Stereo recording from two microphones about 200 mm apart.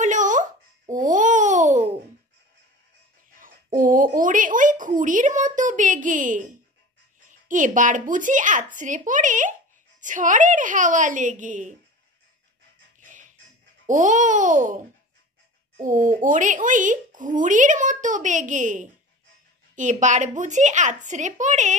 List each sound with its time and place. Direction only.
0.0 s a sound: 40° right (ahead or behind)
0.9 s babbling: 40° right (ahead or behind)
3.3 s a sound: 45° right (ahead or behind)
7.2 s speech: 40° right (ahead or behind)
13.0 s music: 40° right (ahead or behind)
13.8 s speech: 40° right (ahead or behind)
15.8 s speech: 40° right (ahead or behind)